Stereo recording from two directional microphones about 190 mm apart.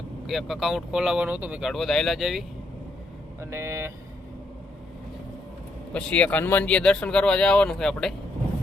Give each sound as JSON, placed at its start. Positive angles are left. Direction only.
{"t": 0.3, "sound": "speech", "side_deg": 0}
{"t": 3.4, "sound": "speech", "side_deg": -15}
{"t": 5.9, "sound": "speech", "side_deg": 5}